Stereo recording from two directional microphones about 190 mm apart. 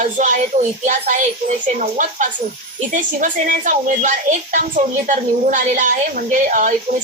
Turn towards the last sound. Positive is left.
turn(degrees=-40)  # may be behind; listen again after turning